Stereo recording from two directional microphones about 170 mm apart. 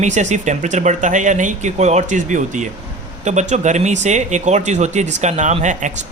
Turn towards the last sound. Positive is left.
turn(degrees=-45)  # may be behind; listen again after turning